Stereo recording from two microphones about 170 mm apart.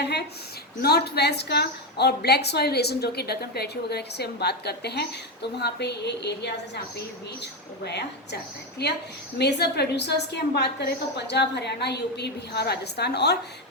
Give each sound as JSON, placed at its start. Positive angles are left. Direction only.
{"t": 0.0, "sound": "a sound", "side_deg": 75}
{"t": 0.8, "sound": "a woman's voice", "side_deg": 70}
{"t": 7.9, "sound": "a woman's voice", "side_deg": 80}